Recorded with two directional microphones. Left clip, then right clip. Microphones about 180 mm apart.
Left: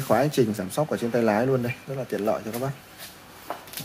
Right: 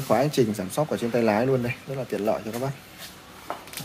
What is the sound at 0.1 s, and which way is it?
Speech, 10° left (ahead or behind).